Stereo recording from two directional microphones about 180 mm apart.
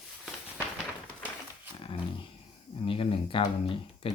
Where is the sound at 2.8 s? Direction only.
30° left (ahead or behind).